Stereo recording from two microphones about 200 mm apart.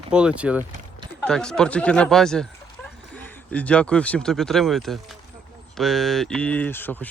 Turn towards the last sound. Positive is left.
turn(degrees=10)  # may be behind; listen again after turning